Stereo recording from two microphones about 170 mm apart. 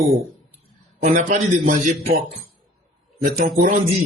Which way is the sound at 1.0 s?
50° right (ahead or behind).